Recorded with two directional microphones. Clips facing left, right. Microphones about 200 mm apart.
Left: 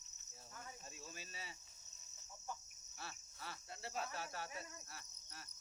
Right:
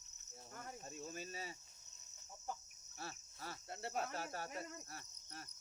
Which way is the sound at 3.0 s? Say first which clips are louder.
Right 3 dB; 40° right (ahead or behind).